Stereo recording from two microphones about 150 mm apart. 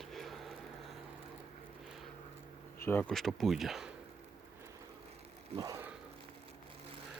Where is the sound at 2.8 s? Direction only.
15° left (ahead or behind).